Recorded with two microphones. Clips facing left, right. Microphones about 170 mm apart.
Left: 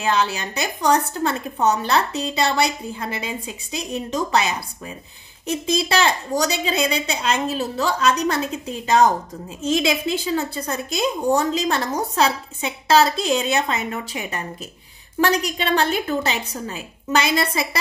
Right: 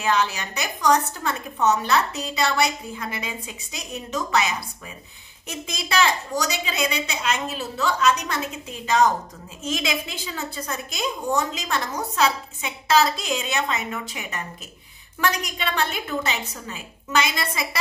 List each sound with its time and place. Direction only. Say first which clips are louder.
0.0 s a woman's voice: left 2 dB; 30° left (ahead or behind)